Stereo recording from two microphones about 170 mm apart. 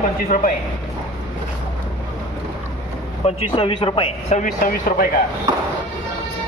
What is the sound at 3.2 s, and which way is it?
Speech, 30° left (ahead or behind).